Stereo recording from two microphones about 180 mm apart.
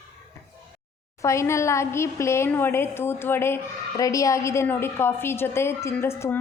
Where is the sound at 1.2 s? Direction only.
15° left (ahead or behind).